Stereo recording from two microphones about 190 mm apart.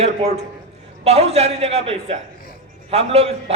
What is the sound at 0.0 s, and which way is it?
A man's voice, 35° right (ahead or behind).